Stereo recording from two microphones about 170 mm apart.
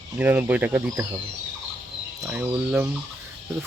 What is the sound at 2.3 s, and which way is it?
Speech, 10° right (ahead or behind).